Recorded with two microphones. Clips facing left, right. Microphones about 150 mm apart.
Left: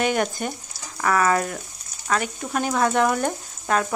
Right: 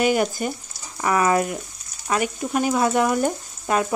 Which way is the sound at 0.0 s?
5° right (ahead or behind).